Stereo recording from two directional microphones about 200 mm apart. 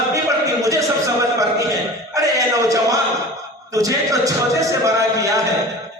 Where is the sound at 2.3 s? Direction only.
15° right (ahead or behind).